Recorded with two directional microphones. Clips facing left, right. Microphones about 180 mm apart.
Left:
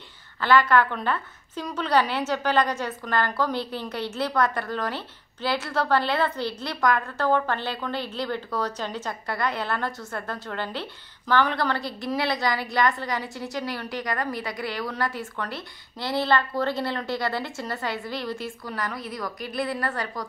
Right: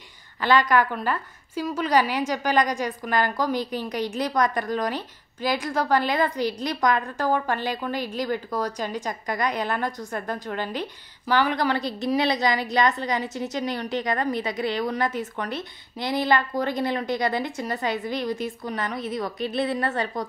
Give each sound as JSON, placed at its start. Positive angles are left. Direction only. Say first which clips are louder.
{"t": 0.4, "sound": "a woman's voice", "louder": "even", "side_deg": -15}